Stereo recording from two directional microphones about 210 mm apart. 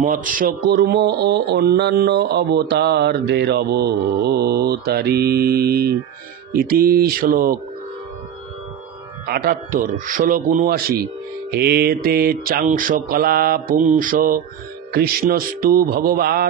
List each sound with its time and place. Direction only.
0.0 s speech: 40° right (ahead or behind)
9.2 s speech: 45° right (ahead or behind)